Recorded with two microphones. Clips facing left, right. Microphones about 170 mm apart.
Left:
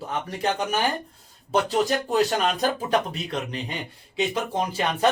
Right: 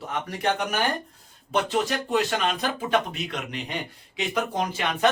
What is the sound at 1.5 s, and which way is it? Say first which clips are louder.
Speech: left 3 dB; 35° left (ahead or behind).